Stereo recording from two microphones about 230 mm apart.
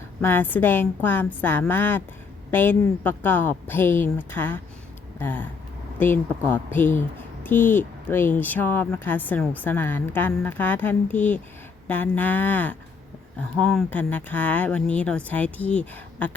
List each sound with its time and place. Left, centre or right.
0.2 s speech: centre